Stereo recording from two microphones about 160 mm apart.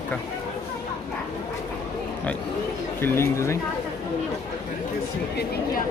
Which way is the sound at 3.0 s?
15° left (ahead or behind).